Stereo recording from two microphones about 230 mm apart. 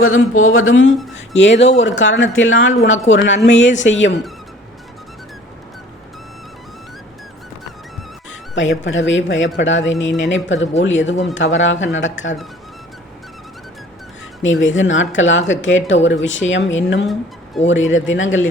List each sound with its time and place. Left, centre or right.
0.0 s speech: left
8.3 s speech: left
14.4 s speech: left